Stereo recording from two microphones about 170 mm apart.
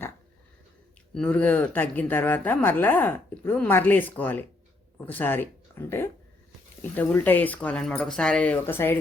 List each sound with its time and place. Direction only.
1.1 s speech: 10° left (ahead or behind)